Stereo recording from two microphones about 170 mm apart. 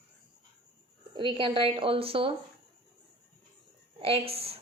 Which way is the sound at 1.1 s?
30° right (ahead or behind).